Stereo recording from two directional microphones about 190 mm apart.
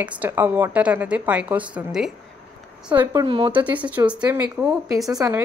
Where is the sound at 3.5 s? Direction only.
5° right (ahead or behind).